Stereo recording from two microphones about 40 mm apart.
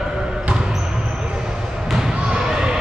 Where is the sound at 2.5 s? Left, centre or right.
Right.